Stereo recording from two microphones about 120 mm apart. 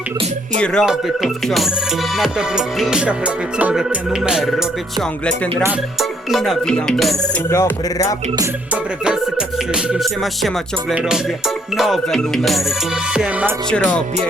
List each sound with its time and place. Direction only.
0.5 s speech: 5° left (ahead or behind)
0.9 s music: 5° right (ahead or behind)
6.0 s music: centre (ahead or behind)
7.5 s speech: 25° left (ahead or behind)
9.9 s music: centre (ahead or behind)
13.7 s speech: 10° left (ahead or behind)